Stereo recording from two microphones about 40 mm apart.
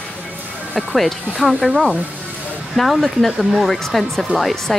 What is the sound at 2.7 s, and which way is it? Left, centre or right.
A woman's voice, centre.